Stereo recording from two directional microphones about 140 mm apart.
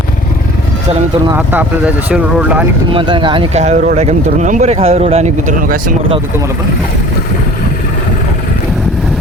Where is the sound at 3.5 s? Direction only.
55° right (ahead or behind); by 5.9 s 75° right (ahead or behind).